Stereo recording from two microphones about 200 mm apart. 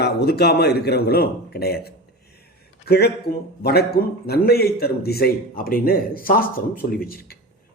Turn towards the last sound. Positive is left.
turn(degrees=50)  # may be behind; listen again after turning